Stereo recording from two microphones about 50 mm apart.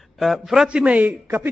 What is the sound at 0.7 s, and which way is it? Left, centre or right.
Speech, right.